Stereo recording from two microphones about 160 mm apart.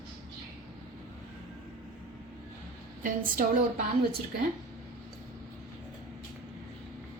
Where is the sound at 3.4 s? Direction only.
60° right (ahead or behind).